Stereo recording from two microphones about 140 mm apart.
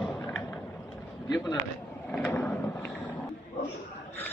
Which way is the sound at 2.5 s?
10° left (ahead or behind).